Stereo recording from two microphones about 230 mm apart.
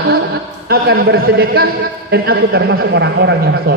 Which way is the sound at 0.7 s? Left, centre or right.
Right.